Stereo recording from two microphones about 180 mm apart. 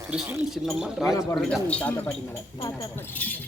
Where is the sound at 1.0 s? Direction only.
15° left (ahead or behind).